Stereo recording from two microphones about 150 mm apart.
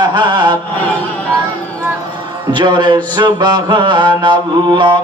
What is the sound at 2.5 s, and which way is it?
Music, 30° right (ahead or behind).